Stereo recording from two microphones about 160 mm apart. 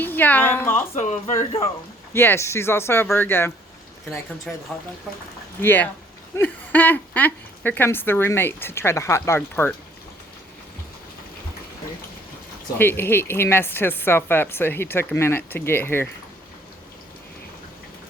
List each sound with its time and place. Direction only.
0.0 s speech: 10° left (ahead or behind)
0.9 s speech: 50° left (ahead or behind)
2.1 s speech: 15° left (ahead or behind)
5.6 s speech: 10° left (ahead or behind)
12.8 s speech: 15° left (ahead or behind)